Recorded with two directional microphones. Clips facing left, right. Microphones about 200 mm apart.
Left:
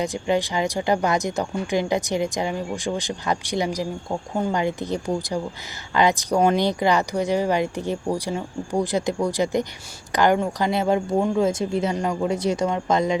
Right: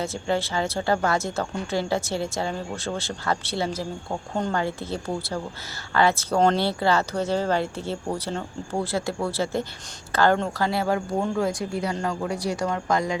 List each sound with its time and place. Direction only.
0.0 s speech: 15° left (ahead or behind)